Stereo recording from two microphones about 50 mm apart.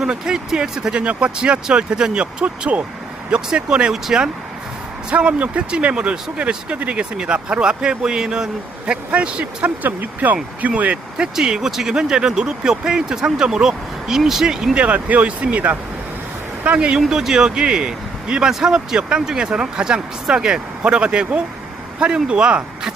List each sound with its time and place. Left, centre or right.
0.0 s speech: centre
3.9 s speech: centre
5.1 s speech: right
11.2 s speech: centre
14.8 s speech: right